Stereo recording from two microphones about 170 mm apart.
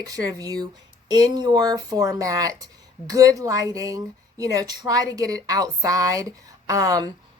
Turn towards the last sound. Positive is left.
turn(degrees=-20)  # may be behind; listen again after turning